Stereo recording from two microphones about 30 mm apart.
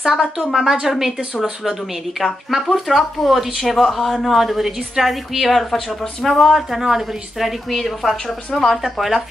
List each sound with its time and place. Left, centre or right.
0.0 s speech: centre